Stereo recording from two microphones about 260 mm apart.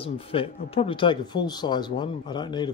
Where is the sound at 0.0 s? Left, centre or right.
Left.